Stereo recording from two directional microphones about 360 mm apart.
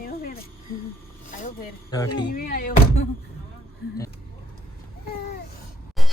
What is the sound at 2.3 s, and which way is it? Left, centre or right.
Speech, left.